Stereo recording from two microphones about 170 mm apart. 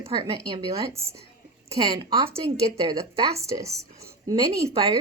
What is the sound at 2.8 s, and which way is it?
A woman's voice, 20° right (ahead or behind).